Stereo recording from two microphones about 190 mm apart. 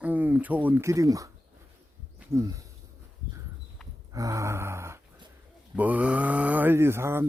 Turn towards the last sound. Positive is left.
turn(degrees=-15)  # may be behind; listen again after turning